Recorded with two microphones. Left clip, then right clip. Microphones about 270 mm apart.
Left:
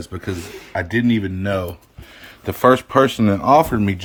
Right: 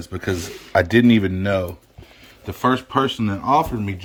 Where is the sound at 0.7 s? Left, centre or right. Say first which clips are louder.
Right 5 dB; centre.